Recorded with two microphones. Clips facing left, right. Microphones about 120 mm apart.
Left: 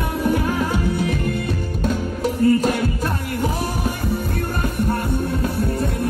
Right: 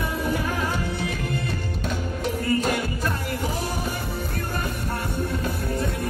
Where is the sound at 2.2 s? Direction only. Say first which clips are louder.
Left 7 dB; 40° left (ahead or behind).